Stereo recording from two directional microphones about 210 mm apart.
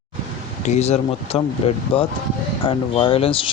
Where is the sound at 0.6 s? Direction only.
30° left (ahead or behind).